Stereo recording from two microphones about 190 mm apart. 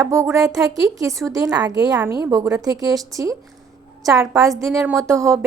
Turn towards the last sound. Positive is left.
turn(degrees=-15)  # may be behind; listen again after turning